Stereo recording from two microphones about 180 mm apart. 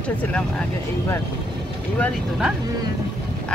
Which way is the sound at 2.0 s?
Centre (ahead or behind).